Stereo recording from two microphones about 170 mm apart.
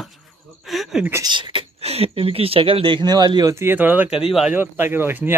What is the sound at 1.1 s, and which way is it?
Speech, 25° right (ahead or behind).